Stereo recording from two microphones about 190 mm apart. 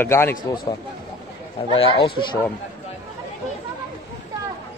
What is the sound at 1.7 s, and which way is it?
Speech, 30° left (ahead or behind).